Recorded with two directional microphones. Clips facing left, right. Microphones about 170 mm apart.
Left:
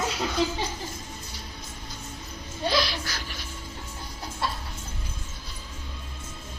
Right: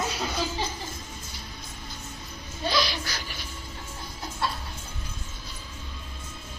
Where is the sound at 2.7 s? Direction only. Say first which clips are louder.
Left 1 dB; centre (ahead or behind).